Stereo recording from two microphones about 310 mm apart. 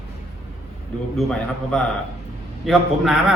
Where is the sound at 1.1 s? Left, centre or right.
Centre.